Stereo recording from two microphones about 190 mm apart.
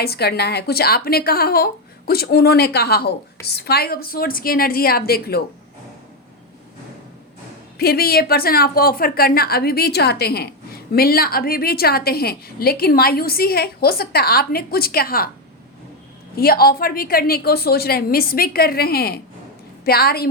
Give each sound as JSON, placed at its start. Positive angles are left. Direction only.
{"t": 0.0, "sound": "a woman's voice", "side_deg": 55}
{"t": 7.8, "sound": "a woman's voice", "side_deg": 55}
{"t": 16.3, "sound": "a woman's voice", "side_deg": 55}